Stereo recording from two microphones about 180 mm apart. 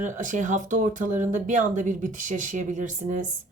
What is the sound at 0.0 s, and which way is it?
Speech, 45° right (ahead or behind).